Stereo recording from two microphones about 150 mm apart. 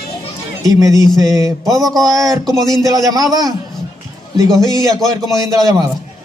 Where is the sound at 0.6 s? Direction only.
25° right (ahead or behind).